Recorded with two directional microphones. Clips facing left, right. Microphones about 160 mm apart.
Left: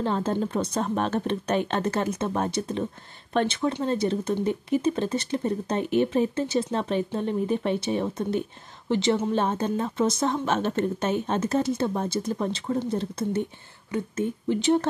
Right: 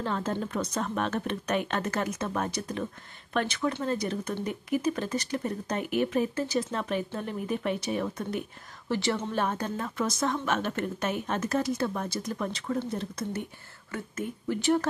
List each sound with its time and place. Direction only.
0.0 s a woman's voice: 30° left (ahead or behind)